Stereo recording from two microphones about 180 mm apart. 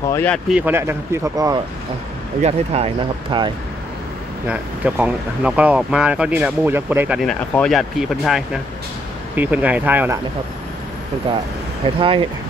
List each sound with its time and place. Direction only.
0.1 s speech: 10° left (ahead or behind)
0.5 s speech: 10° right (ahead or behind)
2.4 s speech: 35° right (ahead or behind)
4.5 s speech: 10° right (ahead or behind)
12.0 s speech: 30° right (ahead or behind)